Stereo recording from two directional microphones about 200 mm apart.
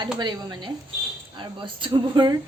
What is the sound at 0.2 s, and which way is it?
A woman's voice, 20° right (ahead or behind).